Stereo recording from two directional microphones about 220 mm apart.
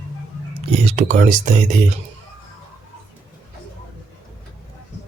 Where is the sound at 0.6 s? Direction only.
30° right (ahead or behind).